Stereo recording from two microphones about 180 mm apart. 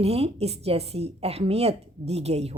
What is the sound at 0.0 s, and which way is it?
Speech, 35° right (ahead or behind).